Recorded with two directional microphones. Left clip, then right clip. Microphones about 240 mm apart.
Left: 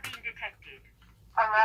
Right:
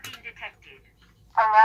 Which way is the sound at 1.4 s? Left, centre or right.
Centre.